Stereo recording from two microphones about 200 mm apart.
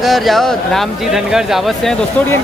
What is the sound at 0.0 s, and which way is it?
Speech, centre (ahead or behind).